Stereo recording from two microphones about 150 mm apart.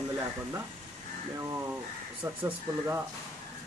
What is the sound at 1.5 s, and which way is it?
Speech, 15° right (ahead or behind).